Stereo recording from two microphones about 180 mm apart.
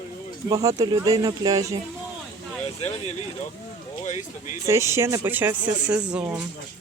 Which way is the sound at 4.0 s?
40° left (ahead or behind).